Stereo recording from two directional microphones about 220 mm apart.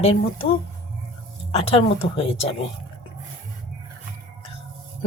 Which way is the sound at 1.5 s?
25° left (ahead or behind).